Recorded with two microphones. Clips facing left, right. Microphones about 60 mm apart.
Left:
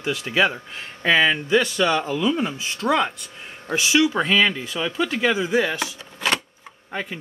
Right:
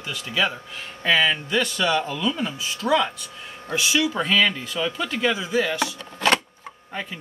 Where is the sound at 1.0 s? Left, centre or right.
Centre.